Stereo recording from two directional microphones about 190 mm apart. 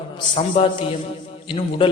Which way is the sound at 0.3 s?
25° left (ahead or behind).